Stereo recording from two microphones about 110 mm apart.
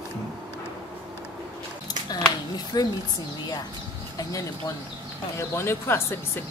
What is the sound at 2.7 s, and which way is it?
Speech, 40° left (ahead or behind).